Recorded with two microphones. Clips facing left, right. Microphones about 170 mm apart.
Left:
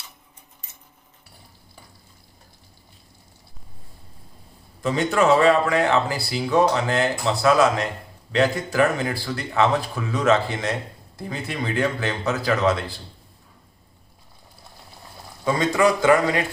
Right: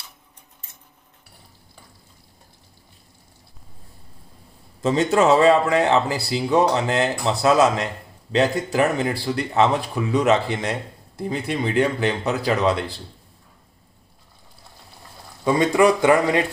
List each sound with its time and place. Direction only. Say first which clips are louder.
4.8 s speech: right 2 dB; 25° right (ahead or behind)
15.4 s speech: right 3 dB; 20° right (ahead or behind)